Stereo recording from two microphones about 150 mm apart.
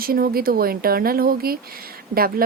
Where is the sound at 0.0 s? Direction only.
80° right.